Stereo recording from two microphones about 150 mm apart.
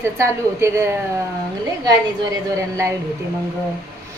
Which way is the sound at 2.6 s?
20° right (ahead or behind).